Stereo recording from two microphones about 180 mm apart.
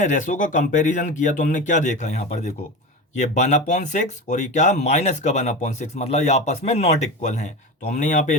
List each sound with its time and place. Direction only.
0.0 s speech: 45° left (ahead or behind)